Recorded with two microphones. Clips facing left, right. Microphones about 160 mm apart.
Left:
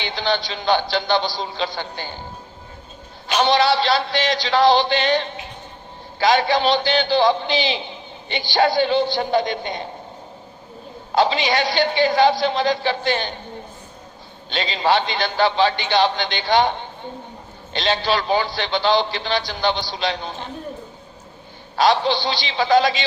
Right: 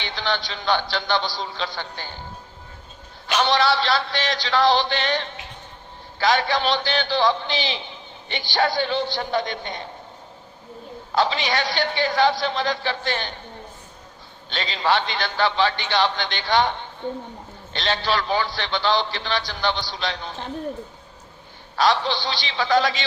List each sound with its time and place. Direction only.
0.0 s a man's voice: 15° left (ahead or behind)
3.4 s a man's voice: 15° left (ahead or behind)
11.2 s a man's voice: 15° left (ahead or behind)
14.5 s a man's voice: 20° left (ahead or behind)
21.8 s a man's voice: 20° left (ahead or behind)